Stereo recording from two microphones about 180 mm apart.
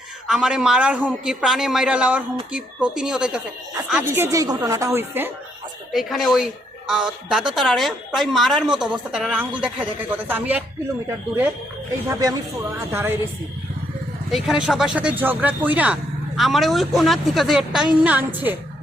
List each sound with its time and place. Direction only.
0.3 s a woman's voice: 5° right (ahead or behind)
5.9 s a woman's voice: centre (ahead or behind)
12.0 s a woman's voice: 20° right (ahead or behind)
14.3 s a woman's voice: centre (ahead or behind)